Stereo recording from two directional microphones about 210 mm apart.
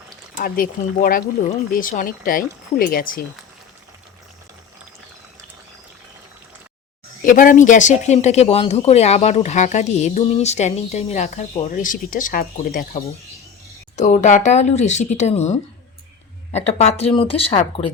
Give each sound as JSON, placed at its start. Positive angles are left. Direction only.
{"t": 0.3, "sound": "speech", "side_deg": 40}
{"t": 7.3, "sound": "speech", "side_deg": 40}